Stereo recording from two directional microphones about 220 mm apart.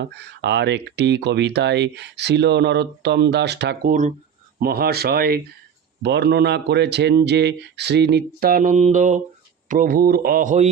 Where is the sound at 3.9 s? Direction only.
35° right (ahead or behind).